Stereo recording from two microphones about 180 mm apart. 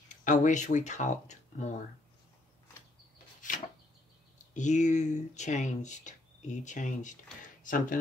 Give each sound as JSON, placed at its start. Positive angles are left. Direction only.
{"t": 0.1, "sound": "speech", "side_deg": 45}
{"t": 3.4, "sound": "a sound", "side_deg": 45}
{"t": 4.6, "sound": "speech", "side_deg": 40}